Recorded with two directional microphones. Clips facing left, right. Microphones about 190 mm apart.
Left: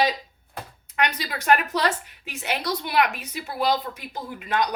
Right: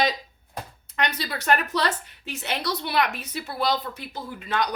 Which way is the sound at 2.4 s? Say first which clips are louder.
Left 1 dB; 10° left (ahead or behind).